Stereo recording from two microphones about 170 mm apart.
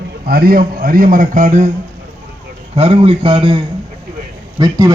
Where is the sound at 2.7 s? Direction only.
35° right (ahead or behind).